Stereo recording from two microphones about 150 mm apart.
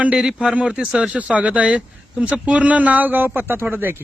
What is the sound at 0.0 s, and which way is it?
Speech, 5° right (ahead or behind).